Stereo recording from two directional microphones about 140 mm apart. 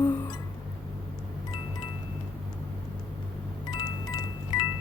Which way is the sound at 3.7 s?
30° left (ahead or behind).